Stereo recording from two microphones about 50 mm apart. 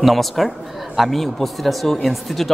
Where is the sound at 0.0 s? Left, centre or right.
Centre.